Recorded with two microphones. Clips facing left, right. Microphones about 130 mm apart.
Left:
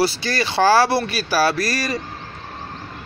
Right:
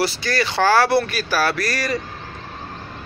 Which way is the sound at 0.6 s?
20° left (ahead or behind).